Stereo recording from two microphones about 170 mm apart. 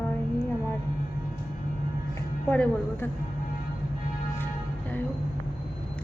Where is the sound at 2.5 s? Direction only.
10° left (ahead or behind).